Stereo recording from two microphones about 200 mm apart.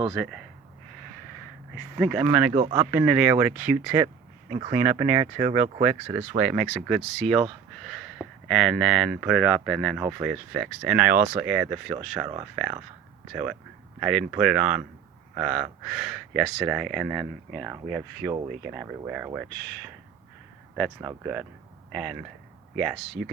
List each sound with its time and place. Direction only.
0.1 s speech: centre (ahead or behind)
2.0 s speech: centre (ahead or behind)
4.5 s speech: 30° right (ahead or behind)
6.1 s speech: 5° right (ahead or behind)
21.0 s speech: 10° right (ahead or behind)